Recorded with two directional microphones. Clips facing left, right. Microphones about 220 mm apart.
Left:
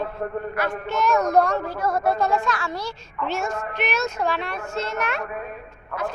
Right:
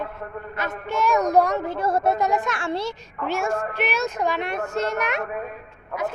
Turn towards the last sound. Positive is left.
turn(degrees=-15)  # may be behind; listen again after turning